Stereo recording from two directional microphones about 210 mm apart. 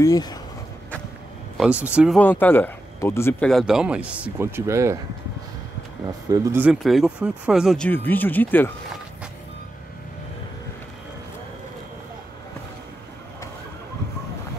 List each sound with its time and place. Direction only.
0.0 s speech: 20° left (ahead or behind)
1.6 s speech: 5° right (ahead or behind)
2.1 s speech: 10° left (ahead or behind); by 4.9 s 15° right (ahead or behind)
6.4 s speech: 10° right (ahead or behind); by 8.7 s 10° left (ahead or behind)